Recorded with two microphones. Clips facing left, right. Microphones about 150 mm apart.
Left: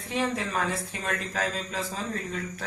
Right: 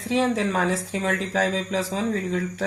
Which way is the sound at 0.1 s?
85° right.